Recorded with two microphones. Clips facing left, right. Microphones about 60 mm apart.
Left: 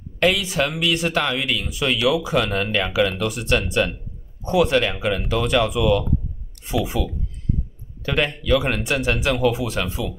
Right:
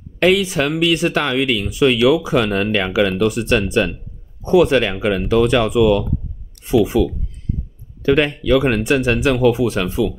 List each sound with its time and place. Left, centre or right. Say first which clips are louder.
0.2 s speech: right 5 dB; right
8.0 s speech: right 7 dB; right